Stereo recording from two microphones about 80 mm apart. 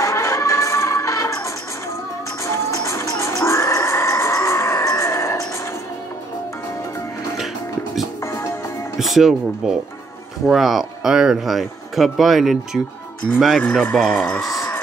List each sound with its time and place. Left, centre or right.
0.0 s music: left
8.3 s music: left
8.9 s speech: centre
13.6 s speech: centre
14.4 s a sound: left